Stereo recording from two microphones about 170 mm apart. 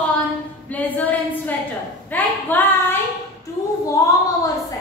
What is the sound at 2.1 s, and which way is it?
Child singing, 10° left (ahead or behind).